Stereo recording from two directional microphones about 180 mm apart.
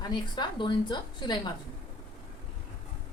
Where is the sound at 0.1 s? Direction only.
25° left (ahead or behind).